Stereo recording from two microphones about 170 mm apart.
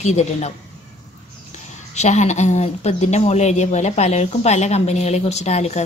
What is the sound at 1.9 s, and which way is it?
Speech, 45° left (ahead or behind).